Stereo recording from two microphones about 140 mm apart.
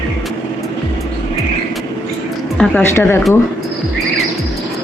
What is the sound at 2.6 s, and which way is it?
Speech, 15° left (ahead or behind).